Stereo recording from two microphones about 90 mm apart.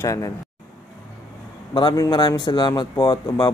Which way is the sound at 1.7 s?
60° left (ahead or behind).